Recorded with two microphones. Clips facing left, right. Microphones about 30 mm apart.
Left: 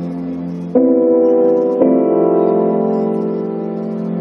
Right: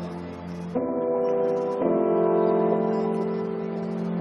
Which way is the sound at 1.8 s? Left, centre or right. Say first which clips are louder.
Left 10 dB; centre.